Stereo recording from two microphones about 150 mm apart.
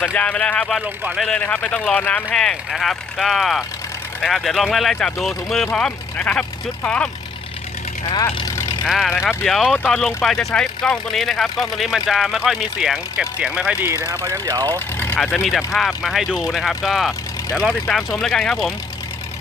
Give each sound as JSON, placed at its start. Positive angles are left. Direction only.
{"t": 0.0, "sound": "speech", "side_deg": 10}
{"t": 0.8, "sound": "speech", "side_deg": -5}
{"t": 1.4, "sound": "speech", "side_deg": 10}
{"t": 8.0, "sound": "speech", "side_deg": 30}
{"t": 8.9, "sound": "speech", "side_deg": 0}
{"t": 14.9, "sound": "vehicle", "side_deg": 15}
{"t": 15.4, "sound": "speech", "side_deg": 0}